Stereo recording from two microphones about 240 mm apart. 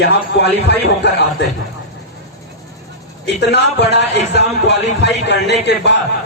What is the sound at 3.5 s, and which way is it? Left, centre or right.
Speech, left.